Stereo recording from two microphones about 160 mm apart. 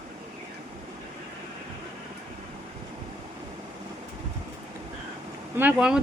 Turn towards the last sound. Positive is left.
turn(degrees=-5)  # may be behind; listen again after turning